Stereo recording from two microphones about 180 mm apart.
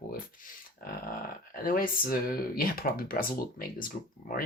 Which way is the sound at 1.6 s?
50° left (ahead or behind).